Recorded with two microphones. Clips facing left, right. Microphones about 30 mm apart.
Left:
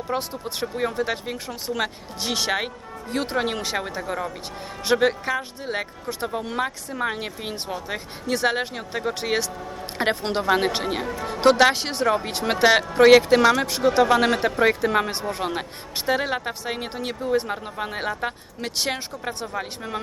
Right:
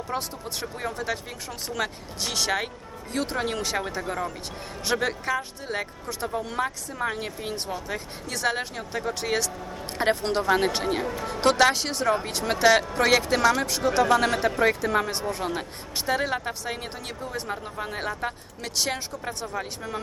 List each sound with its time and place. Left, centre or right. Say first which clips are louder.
0.1 s a woman's voice: left 5 dB; centre